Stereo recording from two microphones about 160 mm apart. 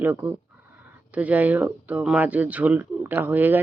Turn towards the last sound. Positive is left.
turn(degrees=-10)  # may be behind; listen again after turning